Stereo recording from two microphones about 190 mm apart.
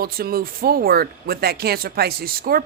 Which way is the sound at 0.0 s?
50° right (ahead or behind).